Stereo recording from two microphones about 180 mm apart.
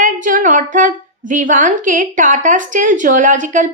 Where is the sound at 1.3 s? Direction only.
45° right (ahead or behind).